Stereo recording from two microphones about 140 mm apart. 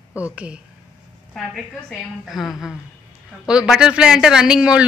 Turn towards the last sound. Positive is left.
turn(degrees=-5)  # may be behind; listen again after turning